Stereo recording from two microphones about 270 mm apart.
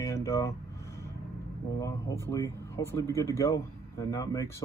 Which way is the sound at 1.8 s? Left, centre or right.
Centre.